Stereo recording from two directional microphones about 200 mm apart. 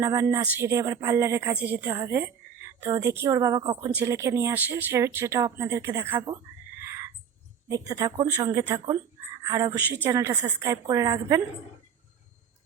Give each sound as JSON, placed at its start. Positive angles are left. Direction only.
{"t": 0.0, "sound": "a woman's voice", "side_deg": -15}